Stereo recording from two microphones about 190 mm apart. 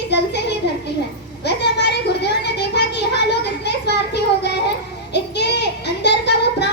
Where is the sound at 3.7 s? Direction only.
60° left (ahead or behind).